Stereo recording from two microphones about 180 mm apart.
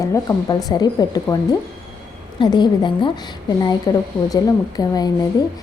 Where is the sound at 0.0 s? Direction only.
20° left (ahead or behind).